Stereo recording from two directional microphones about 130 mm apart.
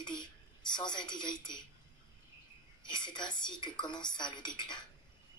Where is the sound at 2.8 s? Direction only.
35° left (ahead or behind).